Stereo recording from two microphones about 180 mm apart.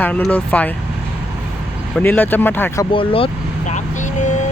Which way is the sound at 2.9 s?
30° left (ahead or behind).